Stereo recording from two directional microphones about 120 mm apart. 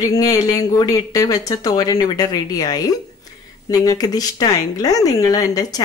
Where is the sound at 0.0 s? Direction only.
30° left (ahead or behind).